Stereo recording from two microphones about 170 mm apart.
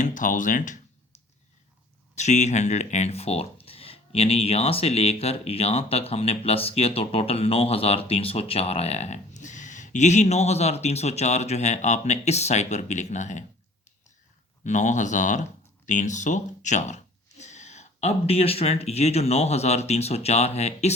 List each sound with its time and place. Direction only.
0.0 s a sound: 50° left (ahead or behind)
2.1 s speech: 40° left (ahead or behind)
14.6 s speech: 45° left (ahead or behind)